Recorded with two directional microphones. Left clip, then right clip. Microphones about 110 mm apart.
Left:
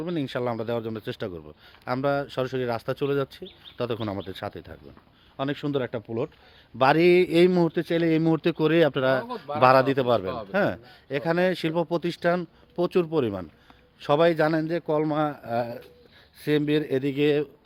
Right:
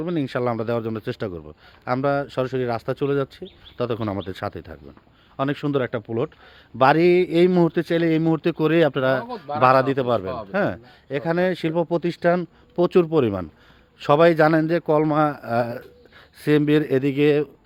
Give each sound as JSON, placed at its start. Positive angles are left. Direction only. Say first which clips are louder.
{"t": 0.0, "sound": "speech", "louder": "right 4 dB", "side_deg": -45}
{"t": 1.3, "sound": "speech", "louder": "right 4 dB", "side_deg": -30}
{"t": 4.3, "sound": "speech", "louder": "right 5 dB", "side_deg": -45}
{"t": 6.9, "sound": "speech", "louder": "right 2 dB", "side_deg": -5}
{"t": 7.5, "sound": "speech", "louder": "right 4 dB", "side_deg": -35}
{"t": 8.0, "sound": "a man's voice", "louder": "right 2 dB", "side_deg": -10}
{"t": 9.3, "sound": "a man's voice", "louder": "right 1 dB", "side_deg": -5}
{"t": 12.7, "sound": "a man's voice", "louder": "right 6 dB", "side_deg": -60}
{"t": 16.4, "sound": "speech", "louder": "right 5 dB", "side_deg": -60}